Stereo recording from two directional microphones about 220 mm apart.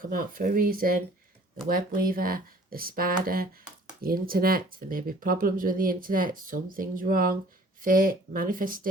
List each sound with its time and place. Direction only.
0.0 s speech: 40° right (ahead or behind)